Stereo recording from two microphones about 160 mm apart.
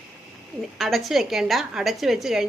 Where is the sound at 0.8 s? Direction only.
Centre (ahead or behind).